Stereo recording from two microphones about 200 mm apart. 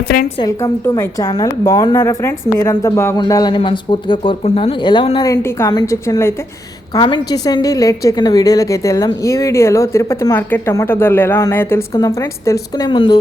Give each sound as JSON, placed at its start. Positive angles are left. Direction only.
{"t": 0.3, "sound": "a woman's voice", "side_deg": 15}